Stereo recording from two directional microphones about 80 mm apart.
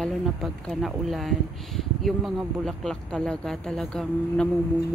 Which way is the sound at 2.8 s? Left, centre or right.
Centre.